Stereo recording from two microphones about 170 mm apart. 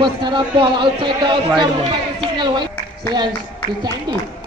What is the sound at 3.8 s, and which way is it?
Speech, 25° right (ahead or behind).